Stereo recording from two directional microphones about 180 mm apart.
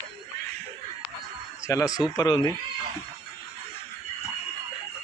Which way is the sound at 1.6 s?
15° left (ahead or behind).